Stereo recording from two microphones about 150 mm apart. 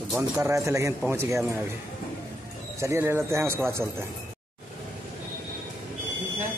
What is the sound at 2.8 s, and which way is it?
Speech, 20° right (ahead or behind).